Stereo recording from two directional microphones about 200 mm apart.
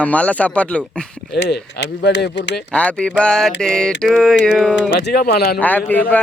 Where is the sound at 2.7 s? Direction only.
5° left (ahead or behind).